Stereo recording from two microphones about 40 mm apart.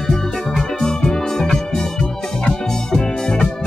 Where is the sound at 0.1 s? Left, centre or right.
Centre.